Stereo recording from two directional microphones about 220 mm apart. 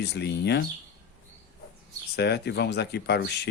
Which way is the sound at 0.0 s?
50° left (ahead or behind).